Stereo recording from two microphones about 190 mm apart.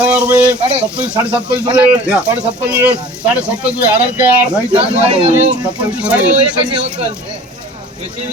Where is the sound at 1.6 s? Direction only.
25° right (ahead or behind).